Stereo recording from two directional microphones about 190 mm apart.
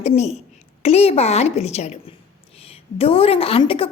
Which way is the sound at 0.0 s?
35° left (ahead or behind).